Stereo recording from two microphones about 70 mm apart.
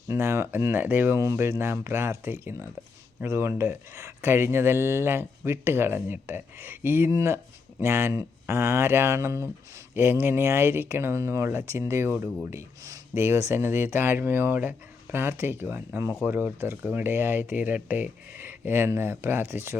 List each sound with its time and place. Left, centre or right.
0.1 s speech: right
1.2 s speech: right
7.1 s speech: right
9.9 s speech: right